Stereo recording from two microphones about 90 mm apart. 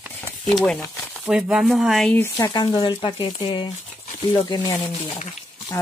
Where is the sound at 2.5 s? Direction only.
55° left (ahead or behind).